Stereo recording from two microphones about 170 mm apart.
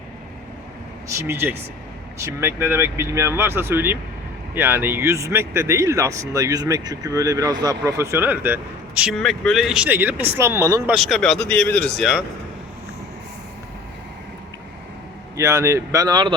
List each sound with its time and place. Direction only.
1.0 s speech: 15° right (ahead or behind)
10.9 s speech: centre (ahead or behind)
15.4 s speech: 15° right (ahead or behind)